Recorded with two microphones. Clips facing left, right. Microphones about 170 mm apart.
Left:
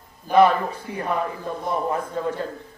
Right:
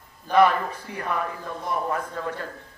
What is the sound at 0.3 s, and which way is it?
A man's voice, 25° left (ahead or behind).